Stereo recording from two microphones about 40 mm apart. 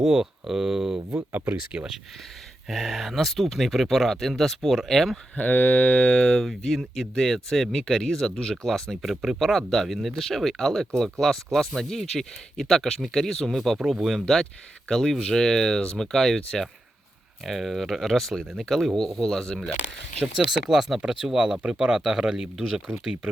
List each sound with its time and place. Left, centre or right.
0.0 s speech: centre
1.3 s speech: right
1.7 s speech: right
2.6 s speech: centre
5.4 s mantra: left
6.6 s speech: centre
13.7 s speech: centre
17.4 s speech: centre
20.5 s speech: centre